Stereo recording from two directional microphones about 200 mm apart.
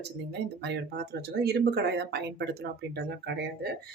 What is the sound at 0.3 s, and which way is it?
Speech, 55° right (ahead or behind).